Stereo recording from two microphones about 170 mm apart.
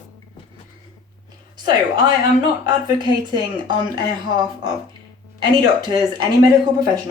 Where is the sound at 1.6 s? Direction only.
25° right (ahead or behind).